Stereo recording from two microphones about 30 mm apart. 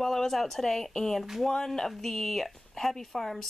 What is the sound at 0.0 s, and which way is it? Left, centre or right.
Speech, centre.